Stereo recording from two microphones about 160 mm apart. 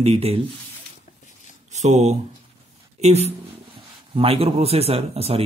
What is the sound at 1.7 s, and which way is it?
Speech, 45° right (ahead or behind).